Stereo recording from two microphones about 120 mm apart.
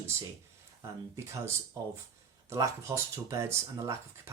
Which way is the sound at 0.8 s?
25° right (ahead or behind).